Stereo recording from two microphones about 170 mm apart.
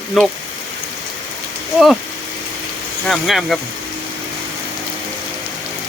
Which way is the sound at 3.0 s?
Centre (ahead or behind).